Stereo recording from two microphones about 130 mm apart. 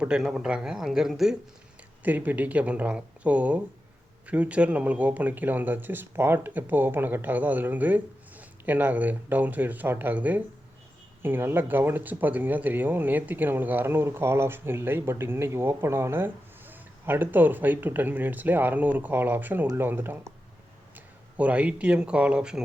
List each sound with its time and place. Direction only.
0.0 s a man's voice: 5° right (ahead or behind)
21.3 s speech: 10° right (ahead or behind)